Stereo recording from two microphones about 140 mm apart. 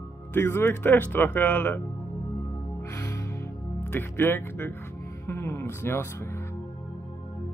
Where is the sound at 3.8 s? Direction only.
15° left (ahead or behind).